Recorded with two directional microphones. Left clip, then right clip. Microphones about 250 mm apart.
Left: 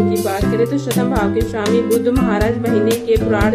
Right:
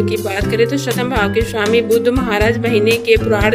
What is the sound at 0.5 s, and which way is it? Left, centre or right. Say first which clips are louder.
Speech: right 2 dB; right.